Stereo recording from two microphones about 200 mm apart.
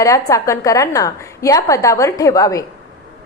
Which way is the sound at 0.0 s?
15° left (ahead or behind).